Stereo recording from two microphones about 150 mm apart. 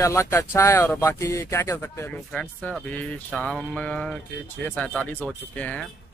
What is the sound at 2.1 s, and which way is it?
Speech, 5° left (ahead or behind).